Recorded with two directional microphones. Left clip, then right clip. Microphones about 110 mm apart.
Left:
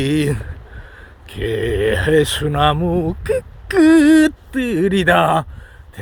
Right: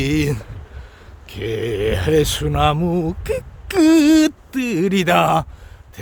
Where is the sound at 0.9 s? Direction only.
20° right (ahead or behind).